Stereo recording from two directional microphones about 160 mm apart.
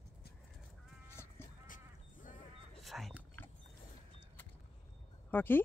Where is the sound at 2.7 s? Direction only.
Centre (ahead or behind).